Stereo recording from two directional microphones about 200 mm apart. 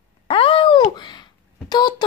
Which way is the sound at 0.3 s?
25° left (ahead or behind).